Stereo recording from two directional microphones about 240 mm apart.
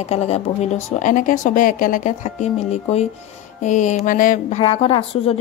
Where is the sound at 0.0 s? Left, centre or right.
Left.